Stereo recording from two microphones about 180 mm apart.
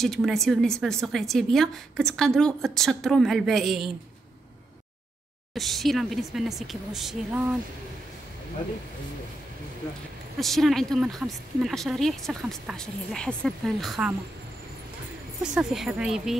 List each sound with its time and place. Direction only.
0.0 s a woman's voice: centre (ahead or behind)
5.5 s a woman's voice: centre (ahead or behind)
10.4 s a woman's voice: centre (ahead or behind)
15.4 s a woman's voice: 5° right (ahead or behind)